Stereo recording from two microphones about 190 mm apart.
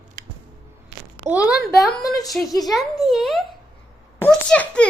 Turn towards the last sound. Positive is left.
turn(degrees=5)  # may be behind; listen again after turning